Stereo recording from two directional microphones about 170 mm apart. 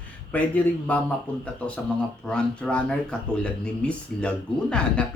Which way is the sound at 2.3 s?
5° left (ahead or behind).